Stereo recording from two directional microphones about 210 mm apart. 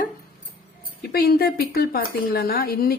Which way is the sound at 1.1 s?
45° left (ahead or behind).